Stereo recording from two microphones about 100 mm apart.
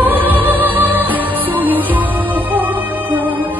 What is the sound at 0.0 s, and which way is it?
Music, 20° right (ahead or behind).